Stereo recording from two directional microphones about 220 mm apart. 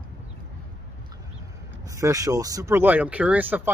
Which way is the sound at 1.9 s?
15° right (ahead or behind).